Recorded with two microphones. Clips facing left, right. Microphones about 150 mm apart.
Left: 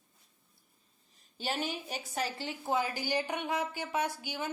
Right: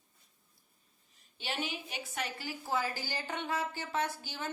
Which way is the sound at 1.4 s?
40° left (ahead or behind).